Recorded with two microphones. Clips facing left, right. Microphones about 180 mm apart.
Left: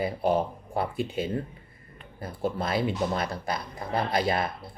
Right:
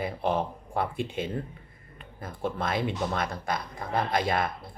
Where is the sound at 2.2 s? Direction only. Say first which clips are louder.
Left 2 dB; 30° left (ahead or behind).